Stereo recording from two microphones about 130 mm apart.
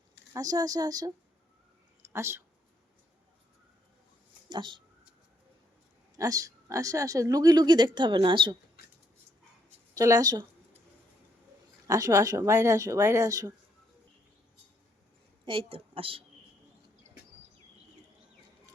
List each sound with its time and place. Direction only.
0.3 s a woman's voice: 30° right (ahead or behind)
2.0 s a sound: 20° right (ahead or behind)
4.4 s speech: 35° right (ahead or behind)
6.1 s a woman's voice: 25° right (ahead or behind)
9.9 s a woman's voice: 25° right (ahead or behind)
11.9 s a woman's voice: 25° right (ahead or behind)
15.4 s a woman's voice: 45° right (ahead or behind)